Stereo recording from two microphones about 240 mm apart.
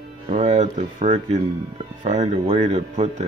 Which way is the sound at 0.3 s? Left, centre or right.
Right.